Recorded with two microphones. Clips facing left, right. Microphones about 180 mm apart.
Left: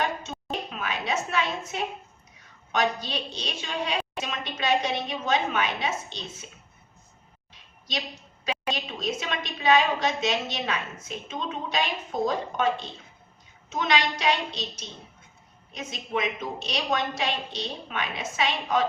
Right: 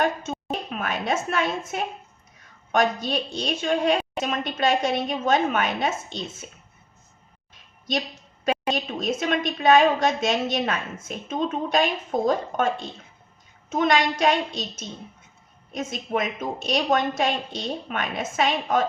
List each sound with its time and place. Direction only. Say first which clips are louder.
0.0 s a sound: right 5 dB; 50° right (ahead or behind)
0.7 s a woman's voice: right 5 dB; 50° right (ahead or behind)
8.4 s a woman's voice: right 6 dB; 50° right (ahead or behind)